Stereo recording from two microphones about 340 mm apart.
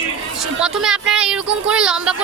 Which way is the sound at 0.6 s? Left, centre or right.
Centre.